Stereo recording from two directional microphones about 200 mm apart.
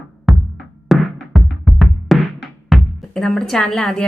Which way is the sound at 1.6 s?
Centre (ahead or behind).